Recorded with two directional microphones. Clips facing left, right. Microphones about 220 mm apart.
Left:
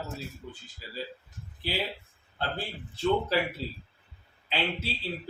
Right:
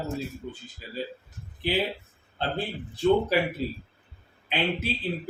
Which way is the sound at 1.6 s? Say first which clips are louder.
Right 6 dB; 20° right (ahead or behind).